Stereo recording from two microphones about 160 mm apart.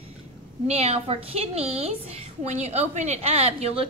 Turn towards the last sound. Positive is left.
turn(degrees=-40)  # may be behind; listen again after turning